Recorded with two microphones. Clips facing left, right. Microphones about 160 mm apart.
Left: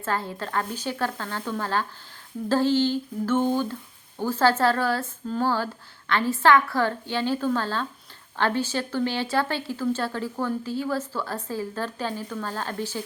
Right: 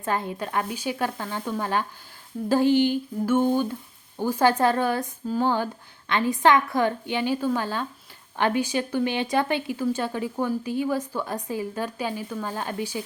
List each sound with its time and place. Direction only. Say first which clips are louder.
0.0 s speech: right 1 dB; 15° right (ahead or behind)